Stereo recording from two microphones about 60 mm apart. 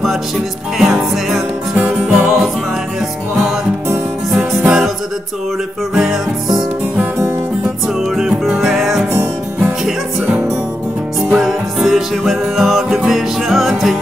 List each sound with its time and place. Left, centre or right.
0.7 s music: centre
4.3 s music: centre
5.9 s music: centre
8.2 s music: centre
11.2 s music: centre